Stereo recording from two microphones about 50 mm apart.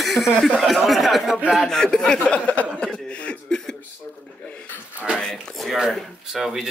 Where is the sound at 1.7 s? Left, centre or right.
Centre.